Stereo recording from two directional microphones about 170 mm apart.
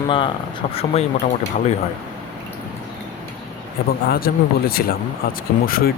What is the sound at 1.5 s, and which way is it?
Speech, 50° left (ahead or behind).